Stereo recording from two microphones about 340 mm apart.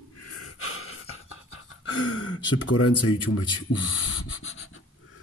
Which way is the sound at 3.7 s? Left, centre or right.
Left.